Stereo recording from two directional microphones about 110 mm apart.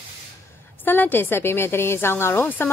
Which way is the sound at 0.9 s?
20° left (ahead or behind).